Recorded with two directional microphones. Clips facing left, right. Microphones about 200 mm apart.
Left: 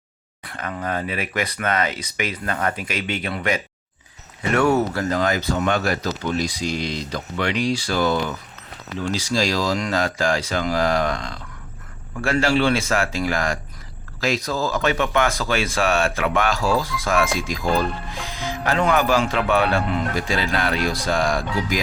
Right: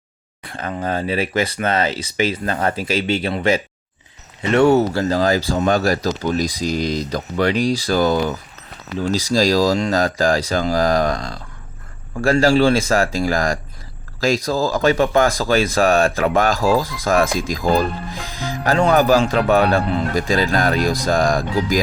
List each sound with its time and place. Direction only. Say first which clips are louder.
0.4 s speech: right 4 dB; 30° right (ahead or behind)